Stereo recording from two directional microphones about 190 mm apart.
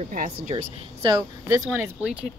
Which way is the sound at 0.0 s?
45° right (ahead or behind).